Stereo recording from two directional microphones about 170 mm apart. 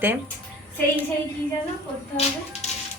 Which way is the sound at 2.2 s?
40° left (ahead or behind).